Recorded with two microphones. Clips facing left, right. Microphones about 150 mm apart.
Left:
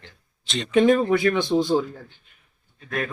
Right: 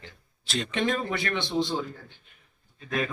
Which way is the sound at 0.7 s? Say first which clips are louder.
Left 12 dB; 50° left (ahead or behind).